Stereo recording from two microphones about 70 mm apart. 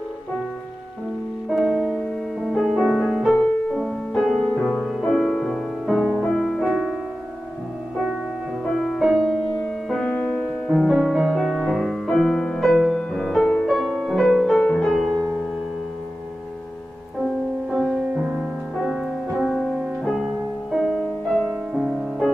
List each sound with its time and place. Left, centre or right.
1.5 s music: centre
8.7 s music: centre
10.7 s music: centre
17.6 s music: centre
18.2 s music: centre
18.8 s music: centre
21.7 s music: centre